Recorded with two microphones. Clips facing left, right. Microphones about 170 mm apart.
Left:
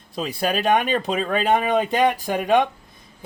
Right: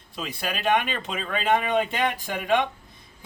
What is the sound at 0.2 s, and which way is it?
Speech, 40° left (ahead or behind).